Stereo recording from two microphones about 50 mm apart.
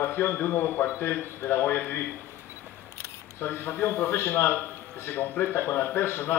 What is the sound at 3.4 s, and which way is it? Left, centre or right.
A man's voice, left.